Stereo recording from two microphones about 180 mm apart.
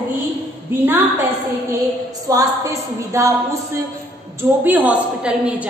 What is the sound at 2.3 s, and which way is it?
Speech, 20° right (ahead or behind).